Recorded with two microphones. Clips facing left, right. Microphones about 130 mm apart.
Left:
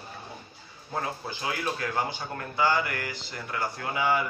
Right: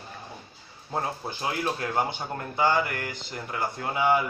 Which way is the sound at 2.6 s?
20° right (ahead or behind).